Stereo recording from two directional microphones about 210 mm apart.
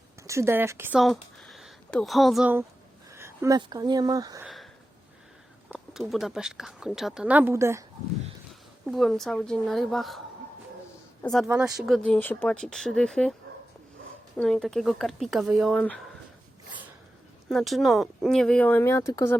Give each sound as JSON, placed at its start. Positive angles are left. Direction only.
{"t": 0.3, "sound": "speech", "side_deg": -10}
{"t": 4.4, "sound": "a sound", "side_deg": 0}
{"t": 5.6, "sound": "a woman's voice", "side_deg": 0}
{"t": 8.9, "sound": "a woman's voice", "side_deg": 0}
{"t": 11.2, "sound": "a woman's voice", "side_deg": 0}
{"t": 14.3, "sound": "a woman's voice", "side_deg": 0}
{"t": 17.5, "sound": "a woman's voice", "side_deg": 0}